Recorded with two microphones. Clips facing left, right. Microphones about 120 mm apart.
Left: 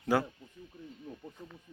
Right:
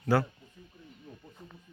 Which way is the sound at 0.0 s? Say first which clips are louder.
Right 2 dB; 20° left (ahead or behind).